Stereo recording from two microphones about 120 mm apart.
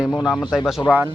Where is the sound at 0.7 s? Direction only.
5° right (ahead or behind).